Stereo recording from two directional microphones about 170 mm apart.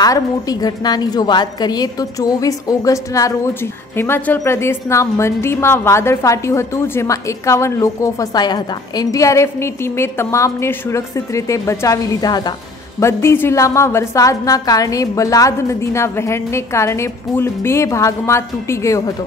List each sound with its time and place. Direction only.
0.0 s a woman's voice: 20° left (ahead or behind)